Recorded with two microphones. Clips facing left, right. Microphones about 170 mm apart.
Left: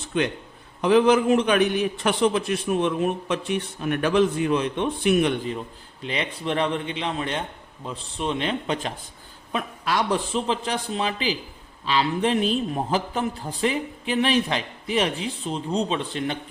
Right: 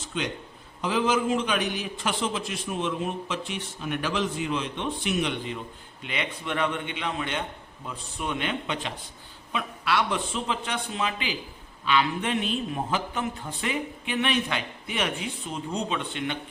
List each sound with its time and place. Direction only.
0.0 s a sound: 60° left (ahead or behind)
0.8 s a man's voice: 60° left (ahead or behind)
6.0 s a man's voice: 35° left (ahead or behind)